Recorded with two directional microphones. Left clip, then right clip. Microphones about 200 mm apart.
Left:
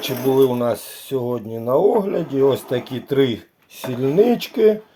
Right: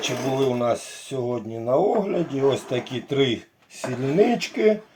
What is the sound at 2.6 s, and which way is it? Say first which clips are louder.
Speech: left 3 dB; 10° left (ahead or behind).